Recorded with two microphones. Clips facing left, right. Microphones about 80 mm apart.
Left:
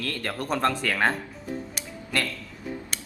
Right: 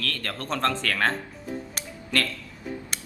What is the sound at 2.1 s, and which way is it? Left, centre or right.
Speech, centre.